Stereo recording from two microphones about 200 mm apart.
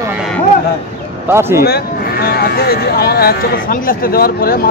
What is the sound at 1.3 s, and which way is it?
Speech, 10° right (ahead or behind).